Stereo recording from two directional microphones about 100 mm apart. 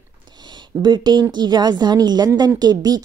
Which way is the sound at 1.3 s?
45° right (ahead or behind).